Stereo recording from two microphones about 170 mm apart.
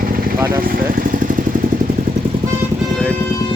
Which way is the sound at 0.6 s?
55° right (ahead or behind).